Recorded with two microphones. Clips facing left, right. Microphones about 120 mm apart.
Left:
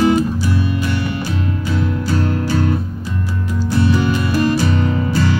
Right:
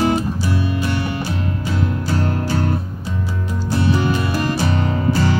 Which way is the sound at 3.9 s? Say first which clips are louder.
Left 2 dB; 30° right (ahead or behind).